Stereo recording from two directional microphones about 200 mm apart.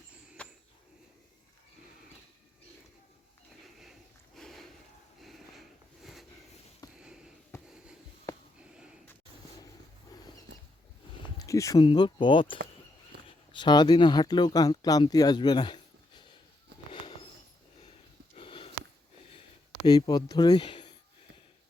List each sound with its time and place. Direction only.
4.4 s a sound: centre (ahead or behind)
5.2 s sniff: centre (ahead or behind)
6.8 s a sound: 20° left (ahead or behind)
11.3 s speech: 15° left (ahead or behind)
18.3 s sniff: 25° left (ahead or behind)
19.8 s speech: 20° left (ahead or behind)